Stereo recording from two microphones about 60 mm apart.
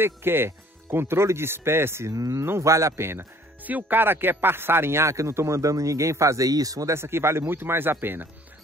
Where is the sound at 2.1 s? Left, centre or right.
Right.